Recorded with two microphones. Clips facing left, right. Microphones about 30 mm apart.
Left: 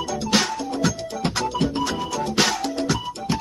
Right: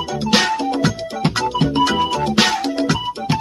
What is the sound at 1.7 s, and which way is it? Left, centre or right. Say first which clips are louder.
Music: right 8 dB; right.